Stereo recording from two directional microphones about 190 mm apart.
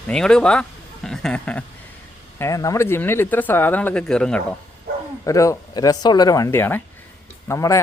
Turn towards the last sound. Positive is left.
turn(degrees=15)  # may be behind; listen again after turning